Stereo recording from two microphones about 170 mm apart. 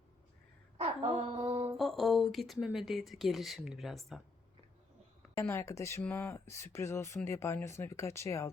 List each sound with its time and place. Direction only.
0.8 s music: 35° right (ahead or behind)
1.7 s speech: centre (ahead or behind)
5.4 s speech: 15° left (ahead or behind)